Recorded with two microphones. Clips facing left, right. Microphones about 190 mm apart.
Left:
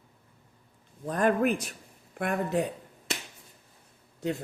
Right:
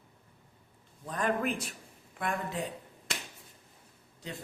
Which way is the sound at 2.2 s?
60° left (ahead or behind).